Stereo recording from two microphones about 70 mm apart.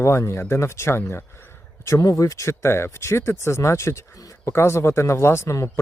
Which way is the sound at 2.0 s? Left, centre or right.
Left.